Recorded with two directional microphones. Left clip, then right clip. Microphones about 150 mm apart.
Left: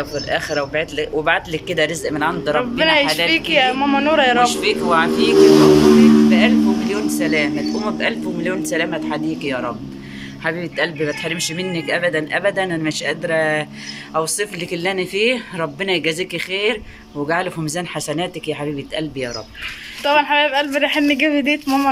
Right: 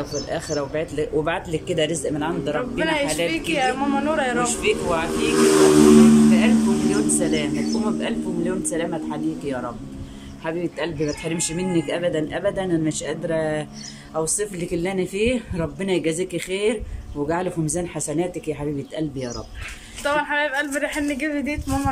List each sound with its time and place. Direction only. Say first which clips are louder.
0.3 s a man's voice: left 7 dB; 25° right (ahead or behind)
2.8 s speech: left 7 dB; 5° left (ahead or behind)
4.5 s speech: left 4 dB; 20° right (ahead or behind)
6.3 s a man's voice: left 4 dB; 5° right (ahead or behind)
20.0 s speech: left 7 dB; 10° left (ahead or behind)